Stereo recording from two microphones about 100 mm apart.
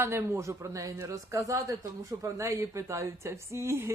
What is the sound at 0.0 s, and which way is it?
A man's voice, 25° right (ahead or behind).